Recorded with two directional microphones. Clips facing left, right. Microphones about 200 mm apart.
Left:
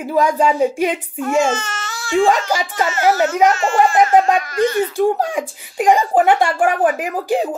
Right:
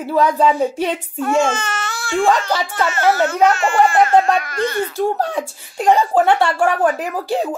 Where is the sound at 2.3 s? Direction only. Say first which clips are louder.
Even; 10° left (ahead or behind).